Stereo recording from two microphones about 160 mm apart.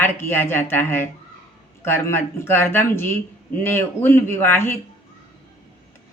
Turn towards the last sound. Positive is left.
turn(degrees=15)  # may be behind; listen again after turning